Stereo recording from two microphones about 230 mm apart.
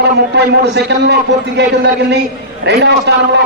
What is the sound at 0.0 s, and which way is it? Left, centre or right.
A man's voice, right.